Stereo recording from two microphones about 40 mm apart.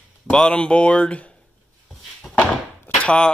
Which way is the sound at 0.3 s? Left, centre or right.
Left.